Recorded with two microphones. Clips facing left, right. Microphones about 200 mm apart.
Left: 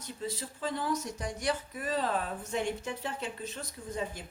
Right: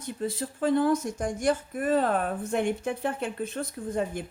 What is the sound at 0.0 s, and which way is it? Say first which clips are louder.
Speech: right 7 dB; 55° right (ahead or behind).